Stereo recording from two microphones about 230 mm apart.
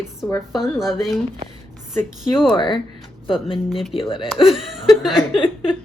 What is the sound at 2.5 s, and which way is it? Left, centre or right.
Speech, centre.